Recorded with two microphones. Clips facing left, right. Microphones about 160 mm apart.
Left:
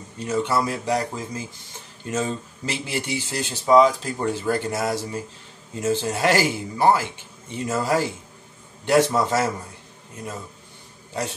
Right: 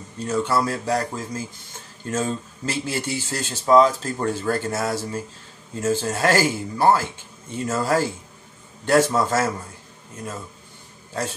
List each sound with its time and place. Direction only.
0.2 s speech: 20° left (ahead or behind)